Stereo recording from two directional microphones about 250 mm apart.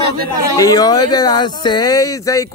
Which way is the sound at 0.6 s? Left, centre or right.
Centre.